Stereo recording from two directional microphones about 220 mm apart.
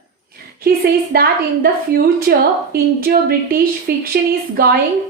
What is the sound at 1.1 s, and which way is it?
Speech, 45° right (ahead or behind).